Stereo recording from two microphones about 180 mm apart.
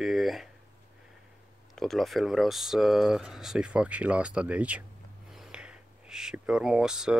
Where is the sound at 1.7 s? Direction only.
Centre (ahead or behind).